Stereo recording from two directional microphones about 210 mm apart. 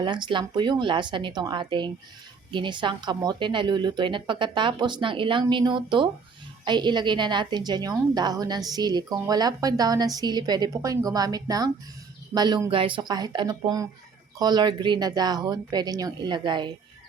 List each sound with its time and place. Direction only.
0.0 s a woman's voice: 20° right (ahead or behind)